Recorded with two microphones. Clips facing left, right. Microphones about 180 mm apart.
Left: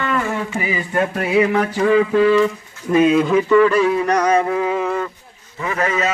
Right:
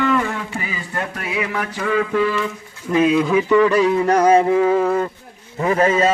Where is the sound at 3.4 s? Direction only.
15° right (ahead or behind).